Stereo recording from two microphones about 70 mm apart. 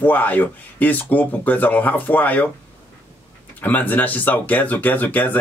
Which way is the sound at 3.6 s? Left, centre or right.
Left.